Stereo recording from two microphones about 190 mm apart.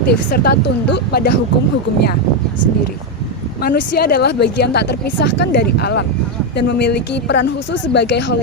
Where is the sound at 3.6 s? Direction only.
55° left (ahead or behind).